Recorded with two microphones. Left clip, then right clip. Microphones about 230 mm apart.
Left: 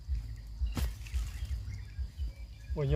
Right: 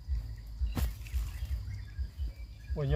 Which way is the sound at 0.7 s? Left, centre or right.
Centre.